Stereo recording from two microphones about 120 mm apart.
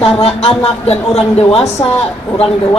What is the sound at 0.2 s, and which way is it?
Speech, 55° left (ahead or behind).